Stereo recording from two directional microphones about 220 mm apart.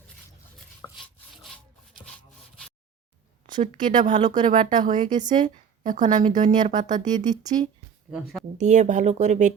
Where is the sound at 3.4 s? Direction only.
25° right (ahead or behind).